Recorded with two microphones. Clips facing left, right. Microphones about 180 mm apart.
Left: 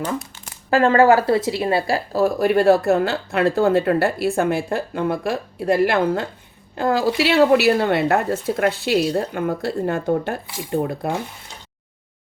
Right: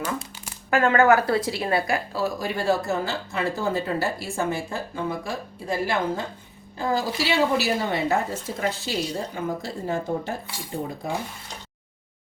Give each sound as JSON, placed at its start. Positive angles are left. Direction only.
{"t": 0.7, "sound": "a woman's voice", "side_deg": 30}
{"t": 2.1, "sound": "a woman's voice", "side_deg": 55}